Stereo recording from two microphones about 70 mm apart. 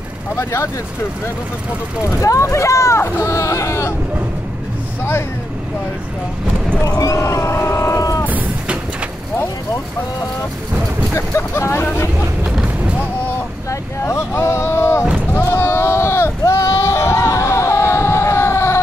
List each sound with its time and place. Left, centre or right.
0.4 s speech: left
2.0 s speech: left
6.8 s a sound: left
8.3 s vehicle: right
11.1 s speech: left
13.7 s speech: left
15.3 s a sound: left